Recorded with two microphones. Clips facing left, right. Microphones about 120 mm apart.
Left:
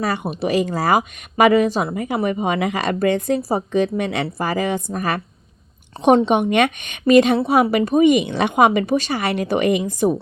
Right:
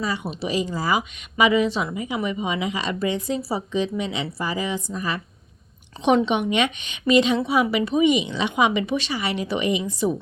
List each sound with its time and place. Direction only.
0.0 s speech: 55° left (ahead or behind)
6.2 s a woman's voice: 45° left (ahead or behind)